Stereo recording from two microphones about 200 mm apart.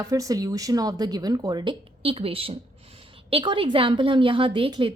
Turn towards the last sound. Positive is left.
turn(degrees=-25)  # may be behind; listen again after turning